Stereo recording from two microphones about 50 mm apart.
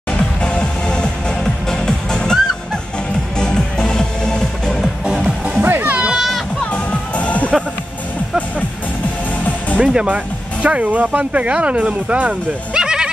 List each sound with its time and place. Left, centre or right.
0.4 s music: centre
5.0 s music: centre
5.6 s music: right
5.9 s children playing: right
6.7 s music: left
9.8 s speech: right
12.8 s goat: centre